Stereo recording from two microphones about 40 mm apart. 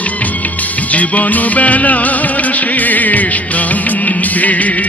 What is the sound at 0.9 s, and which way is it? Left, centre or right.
Music, left.